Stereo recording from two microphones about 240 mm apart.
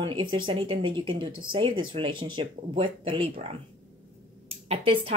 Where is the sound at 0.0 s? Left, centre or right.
Centre.